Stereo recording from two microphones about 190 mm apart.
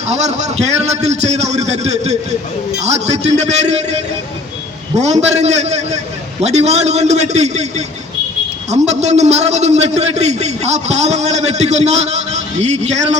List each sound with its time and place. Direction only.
0.1 s a man's voice: 35° right (ahead or behind)